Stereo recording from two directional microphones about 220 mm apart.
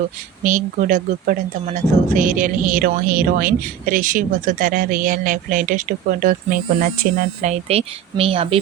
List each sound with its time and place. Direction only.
0.4 s a woman's voice: 35° right (ahead or behind)